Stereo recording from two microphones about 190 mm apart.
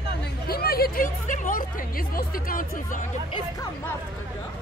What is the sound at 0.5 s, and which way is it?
Speech, 55° left (ahead or behind).